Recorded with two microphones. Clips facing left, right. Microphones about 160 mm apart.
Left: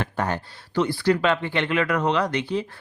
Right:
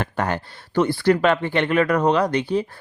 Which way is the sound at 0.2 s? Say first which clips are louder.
Right 2 dB; 80° right.